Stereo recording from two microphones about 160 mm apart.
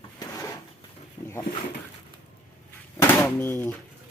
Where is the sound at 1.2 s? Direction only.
40° left (ahead or behind).